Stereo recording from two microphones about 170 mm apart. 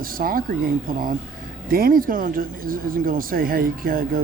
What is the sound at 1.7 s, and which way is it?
Speech, 60° right (ahead or behind).